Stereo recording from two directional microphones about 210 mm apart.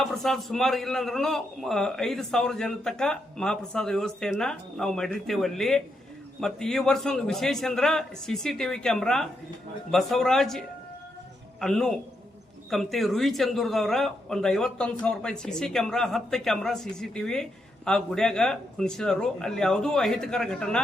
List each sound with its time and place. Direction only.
0.0 s speech: centre (ahead or behind)
11.6 s speech: centre (ahead or behind)